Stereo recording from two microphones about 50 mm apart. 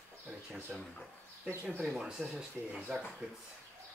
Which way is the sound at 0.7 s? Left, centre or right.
Centre.